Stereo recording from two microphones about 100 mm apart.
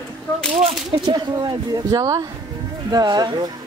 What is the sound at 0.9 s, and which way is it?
Speech, 50° right (ahead or behind).